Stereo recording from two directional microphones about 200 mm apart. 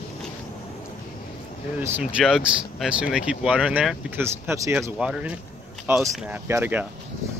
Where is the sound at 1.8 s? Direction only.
5° right (ahead or behind).